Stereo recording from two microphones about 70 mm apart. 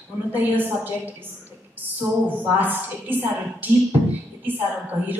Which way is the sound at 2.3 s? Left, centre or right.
Right.